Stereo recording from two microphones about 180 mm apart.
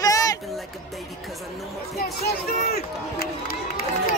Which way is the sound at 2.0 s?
60° left (ahead or behind).